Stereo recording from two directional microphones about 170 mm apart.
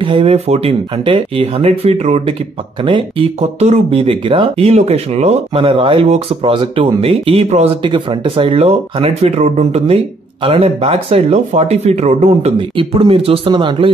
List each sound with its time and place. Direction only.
0.0 s speech: 35° right (ahead or behind)